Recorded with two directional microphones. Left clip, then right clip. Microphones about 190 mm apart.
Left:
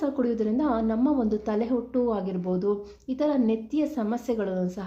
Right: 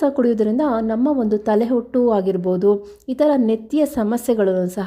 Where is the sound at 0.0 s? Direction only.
40° right (ahead or behind).